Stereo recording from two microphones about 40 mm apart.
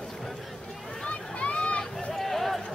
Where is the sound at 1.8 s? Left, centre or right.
Centre.